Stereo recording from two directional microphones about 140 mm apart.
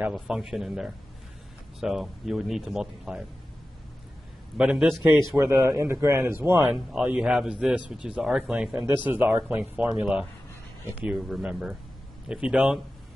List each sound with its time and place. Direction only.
0.1 s speech: centre (ahead or behind)
4.6 s speech: 5° right (ahead or behind)
5.3 s speech: 20° right (ahead or behind)
6.7 s speech: 5° right (ahead or behind)
9.8 s speech: 5° right (ahead or behind)